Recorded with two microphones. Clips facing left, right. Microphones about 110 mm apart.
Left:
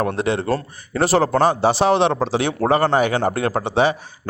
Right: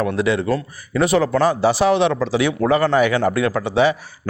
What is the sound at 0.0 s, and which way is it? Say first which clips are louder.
A man's voice: right 1 dB; 30° left (ahead or behind).